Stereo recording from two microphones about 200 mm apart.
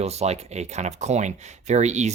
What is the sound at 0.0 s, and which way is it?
Speech, 30° right (ahead or behind).